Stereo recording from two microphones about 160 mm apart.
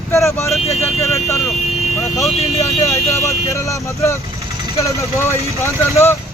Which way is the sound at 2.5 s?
20° left (ahead or behind).